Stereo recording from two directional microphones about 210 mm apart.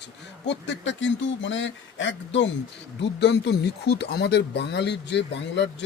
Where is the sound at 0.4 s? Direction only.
55° left (ahead or behind).